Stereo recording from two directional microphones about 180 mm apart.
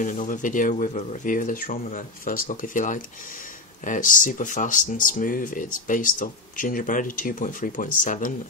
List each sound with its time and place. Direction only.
0.0 s speech: 45° left (ahead or behind)